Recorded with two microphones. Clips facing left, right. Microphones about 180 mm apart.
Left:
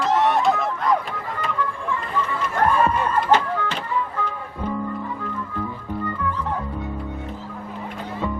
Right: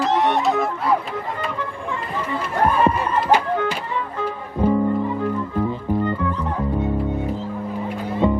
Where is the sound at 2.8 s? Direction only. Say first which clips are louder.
Right 2 dB; 10° right (ahead or behind).